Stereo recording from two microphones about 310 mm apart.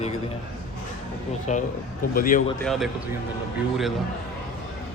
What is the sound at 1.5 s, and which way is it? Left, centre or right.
Speech, left.